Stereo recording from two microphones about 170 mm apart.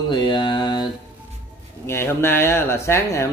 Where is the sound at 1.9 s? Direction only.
15° left (ahead or behind).